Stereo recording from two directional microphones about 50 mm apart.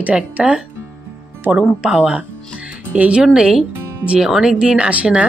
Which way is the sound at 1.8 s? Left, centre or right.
Centre.